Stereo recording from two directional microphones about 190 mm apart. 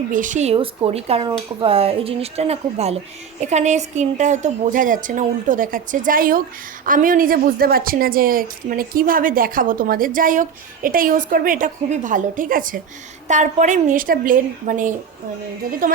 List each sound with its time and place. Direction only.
0.1 s a woman's voice: 45° right (ahead or behind)